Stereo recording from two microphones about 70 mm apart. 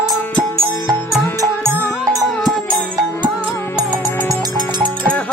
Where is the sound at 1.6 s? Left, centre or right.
Right.